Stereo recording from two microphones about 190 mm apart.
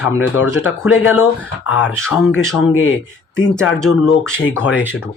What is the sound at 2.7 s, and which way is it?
Speech, 90° left.